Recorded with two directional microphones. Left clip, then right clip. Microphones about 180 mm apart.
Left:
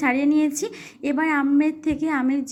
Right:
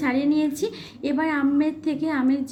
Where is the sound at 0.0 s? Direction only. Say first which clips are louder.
Left 2 dB; 35° left (ahead or behind).